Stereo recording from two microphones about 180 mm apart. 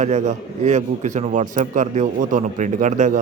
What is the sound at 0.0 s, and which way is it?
A man's voice, 40° right (ahead or behind).